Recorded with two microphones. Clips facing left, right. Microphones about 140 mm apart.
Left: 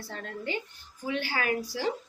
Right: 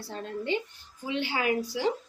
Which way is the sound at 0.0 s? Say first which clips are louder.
Right 3 dB; 25° right (ahead or behind).